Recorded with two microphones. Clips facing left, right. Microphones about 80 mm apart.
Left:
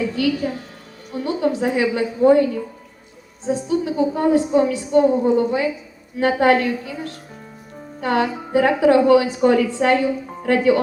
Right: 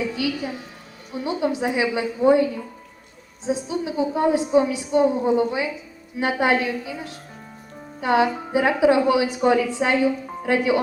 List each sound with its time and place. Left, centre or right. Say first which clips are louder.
0.0 s a woman's voice: left 5 dB; centre
3.4 s a woman's voice: left 4 dB; centre
8.0 s a woman's voice: right 1 dB; centre